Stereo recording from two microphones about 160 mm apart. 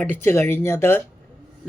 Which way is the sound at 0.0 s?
10° left (ahead or behind).